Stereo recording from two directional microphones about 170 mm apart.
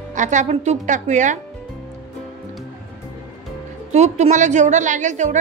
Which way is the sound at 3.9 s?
40° right (ahead or behind).